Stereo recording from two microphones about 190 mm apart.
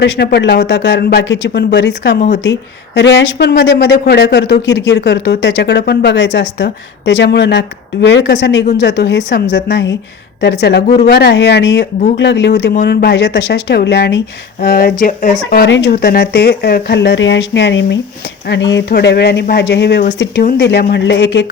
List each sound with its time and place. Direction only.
0.0 s a woman's voice: 60° left (ahead or behind)